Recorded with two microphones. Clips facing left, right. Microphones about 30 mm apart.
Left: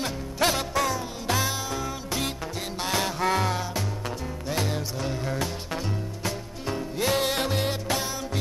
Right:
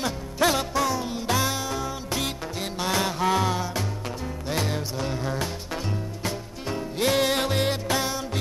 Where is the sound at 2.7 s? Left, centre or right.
Right.